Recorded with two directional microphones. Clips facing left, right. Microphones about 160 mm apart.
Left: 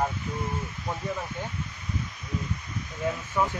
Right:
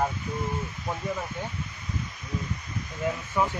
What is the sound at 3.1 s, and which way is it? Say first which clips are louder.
Speech: even; 10° right (ahead or behind).